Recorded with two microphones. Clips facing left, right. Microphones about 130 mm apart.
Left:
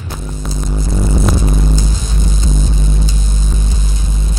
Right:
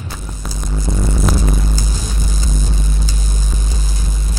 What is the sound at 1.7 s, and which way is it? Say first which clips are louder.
Music: left 4 dB; 25° left (ahead or behind).